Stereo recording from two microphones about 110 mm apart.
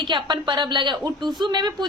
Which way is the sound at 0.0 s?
45° right (ahead or behind).